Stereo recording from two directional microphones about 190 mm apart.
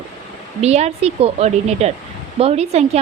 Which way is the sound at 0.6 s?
35° right (ahead or behind).